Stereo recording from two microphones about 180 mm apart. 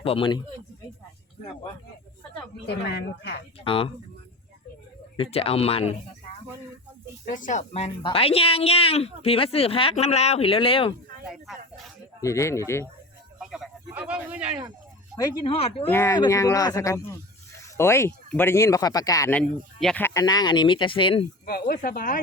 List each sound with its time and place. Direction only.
0.0 s speech: 30° left (ahead or behind)
2.6 s speech: 65° left (ahead or behind)
3.6 s speech: 30° left (ahead or behind)
5.1 s a woman's voice: 30° left (ahead or behind)
7.3 s a woman's voice: 45° left (ahead or behind)
12.2 s speech: 15° left (ahead or behind)
13.4 s a sound: 5° right (ahead or behind)
15.1 s speech: 15° left (ahead or behind)
15.4 s a woman's voice: 30° left (ahead or behind)
15.9 s speech: 15° left (ahead or behind)
19.3 s speech: 5° left (ahead or behind)
20.2 s speech: 20° left (ahead or behind)
21.4 s speech: 55° left (ahead or behind)